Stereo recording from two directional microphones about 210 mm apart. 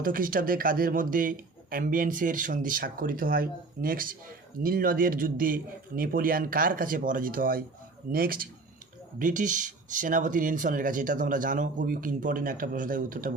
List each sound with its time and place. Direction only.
0.0 s speech: 40° right (ahead or behind)